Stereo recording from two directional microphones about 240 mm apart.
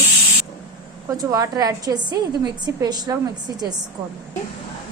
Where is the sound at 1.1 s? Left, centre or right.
Centre.